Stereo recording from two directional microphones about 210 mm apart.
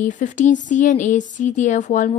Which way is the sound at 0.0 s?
35° left (ahead or behind).